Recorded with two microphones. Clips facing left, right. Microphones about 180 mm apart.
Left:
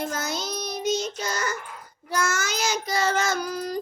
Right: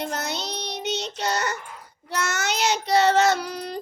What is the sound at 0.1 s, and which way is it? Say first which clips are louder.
Child singing: even; 65° right (ahead or behind).